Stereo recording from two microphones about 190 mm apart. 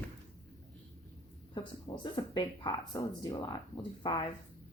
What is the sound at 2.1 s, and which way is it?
Speech, 25° left (ahead or behind).